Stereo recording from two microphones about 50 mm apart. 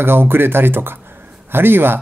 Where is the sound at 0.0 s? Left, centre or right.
Right.